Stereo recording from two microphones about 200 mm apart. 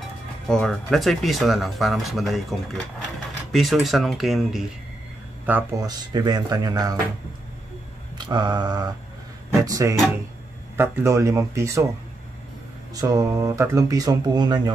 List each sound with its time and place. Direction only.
0.5 s speech: 5° left (ahead or behind)
5.5 s speech: 15° right (ahead or behind)
8.2 s speech: 20° right (ahead or behind)
12.9 s speech: 15° right (ahead or behind)